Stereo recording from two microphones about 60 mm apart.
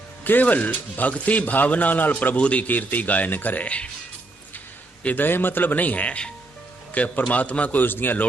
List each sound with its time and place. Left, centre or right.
0.3 s speech: left
5.0 s speech: left